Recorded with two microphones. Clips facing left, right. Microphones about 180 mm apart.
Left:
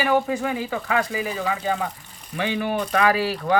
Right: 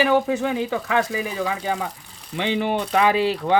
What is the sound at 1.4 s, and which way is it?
Speech, 15° right (ahead or behind).